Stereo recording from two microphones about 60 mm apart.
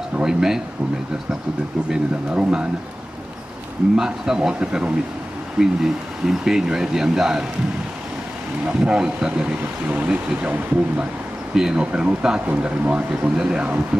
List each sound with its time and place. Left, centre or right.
0.2 s speech: centre
1.9 s speech: centre
3.9 s speech: centre
8.6 s speech: centre
11.5 s speech: centre